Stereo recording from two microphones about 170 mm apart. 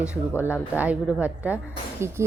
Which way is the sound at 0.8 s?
10° right (ahead or behind).